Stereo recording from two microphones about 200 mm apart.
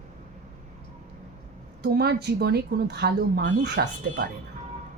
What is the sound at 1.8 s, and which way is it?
Speech, 55° right (ahead or behind).